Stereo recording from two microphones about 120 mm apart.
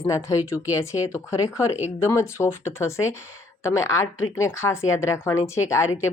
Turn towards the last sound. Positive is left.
turn(degrees=25)  # may be behind; listen again after turning